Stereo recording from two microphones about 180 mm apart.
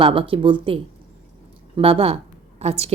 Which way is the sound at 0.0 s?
30° right (ahead or behind).